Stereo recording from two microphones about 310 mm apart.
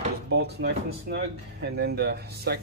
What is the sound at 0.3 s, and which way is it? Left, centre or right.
Speech, right.